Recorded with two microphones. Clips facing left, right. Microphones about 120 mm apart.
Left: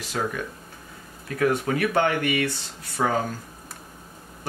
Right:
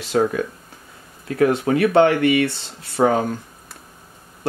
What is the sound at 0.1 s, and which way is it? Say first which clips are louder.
Speech: right 10 dB; 40° right (ahead or behind).